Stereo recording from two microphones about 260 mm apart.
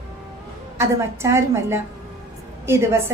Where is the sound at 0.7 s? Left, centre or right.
Centre.